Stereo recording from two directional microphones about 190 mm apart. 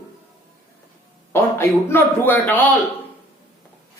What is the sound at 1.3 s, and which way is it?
A man's voice, 10° left (ahead or behind).